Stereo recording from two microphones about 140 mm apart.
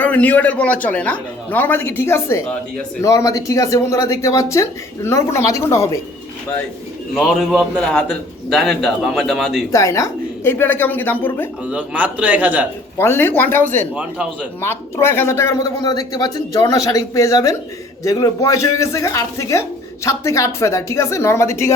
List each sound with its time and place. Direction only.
0.0 s a man's voice: 10° left (ahead or behind)
7.2 s a man's voice: centre (ahead or behind)
9.7 s a man's voice: 25° left (ahead or behind)
11.6 s a man's voice: 10° right (ahead or behind)
13.0 s a man's voice: 15° left (ahead or behind)
13.9 s a man's voice: 10° right (ahead or behind)
14.6 s a man's voice: 20° left (ahead or behind)